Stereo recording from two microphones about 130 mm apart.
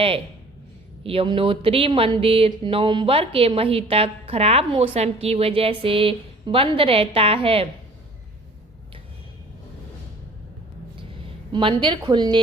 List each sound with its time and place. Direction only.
1.0 s speech: 45° right (ahead or behind)
11.5 s a woman's voice: 35° right (ahead or behind)